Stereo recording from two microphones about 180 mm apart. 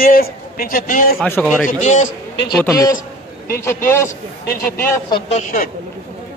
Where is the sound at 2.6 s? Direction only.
15° left (ahead or behind).